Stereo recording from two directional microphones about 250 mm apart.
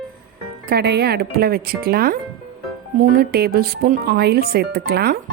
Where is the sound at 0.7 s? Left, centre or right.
Right.